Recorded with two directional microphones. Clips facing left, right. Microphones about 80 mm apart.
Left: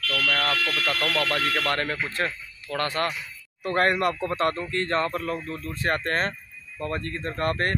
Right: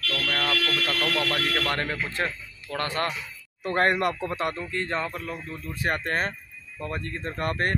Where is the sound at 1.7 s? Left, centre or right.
Right.